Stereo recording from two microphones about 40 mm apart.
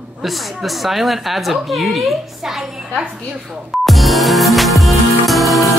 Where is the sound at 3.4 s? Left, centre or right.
Centre.